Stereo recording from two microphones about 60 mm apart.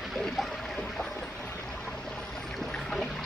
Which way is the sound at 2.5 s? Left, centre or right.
Centre.